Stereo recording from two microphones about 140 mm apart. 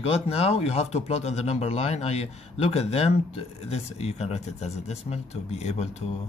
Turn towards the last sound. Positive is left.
turn(degrees=50)  # may be behind; listen again after turning